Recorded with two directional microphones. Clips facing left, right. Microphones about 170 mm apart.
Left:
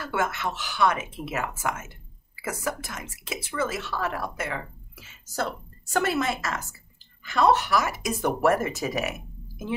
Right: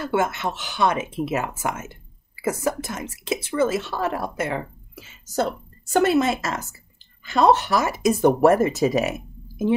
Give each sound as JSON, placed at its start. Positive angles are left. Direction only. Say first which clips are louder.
{"t": 0.0, "sound": "a woman's voice", "louder": "right 5 dB", "side_deg": -20}